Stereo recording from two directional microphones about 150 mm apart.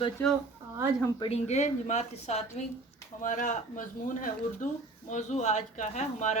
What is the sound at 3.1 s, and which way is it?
Speech, 60° left (ahead or behind).